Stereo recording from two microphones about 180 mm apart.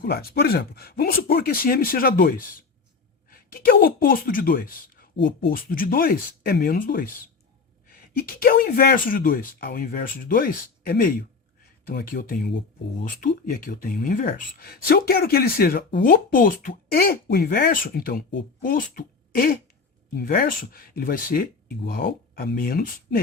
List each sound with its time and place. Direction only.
0.0 s speech: 60° left (ahead or behind)
16.0 s speech: 50° left (ahead or behind)